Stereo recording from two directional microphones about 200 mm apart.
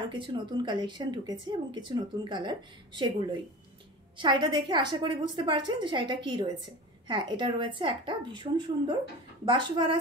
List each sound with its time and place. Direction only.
0.1 s a woman's voice: 25° right (ahead or behind)